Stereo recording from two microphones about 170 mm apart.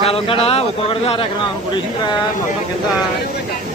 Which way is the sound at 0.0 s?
35° left (ahead or behind).